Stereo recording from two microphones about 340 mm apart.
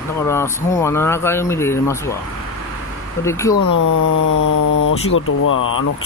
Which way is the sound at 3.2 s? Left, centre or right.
Centre.